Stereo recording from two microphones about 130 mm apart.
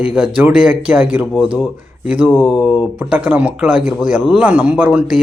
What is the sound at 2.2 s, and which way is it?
Speech, 5° left (ahead or behind).